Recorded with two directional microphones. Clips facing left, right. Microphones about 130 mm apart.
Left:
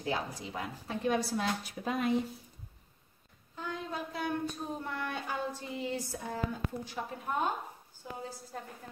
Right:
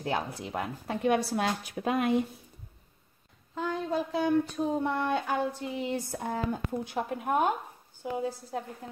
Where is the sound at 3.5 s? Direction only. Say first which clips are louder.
Right 8 dB; 90° right.